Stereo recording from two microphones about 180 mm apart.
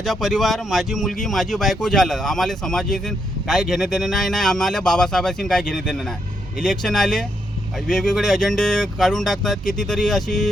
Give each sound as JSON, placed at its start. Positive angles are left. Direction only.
{"t": 0.0, "sound": "speech", "side_deg": 0}